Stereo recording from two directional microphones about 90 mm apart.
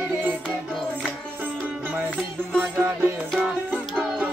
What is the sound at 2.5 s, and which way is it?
Music, 25° right (ahead or behind).